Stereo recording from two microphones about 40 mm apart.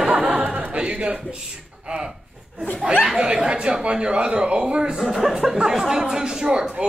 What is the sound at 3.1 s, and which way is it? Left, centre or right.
Speech, centre.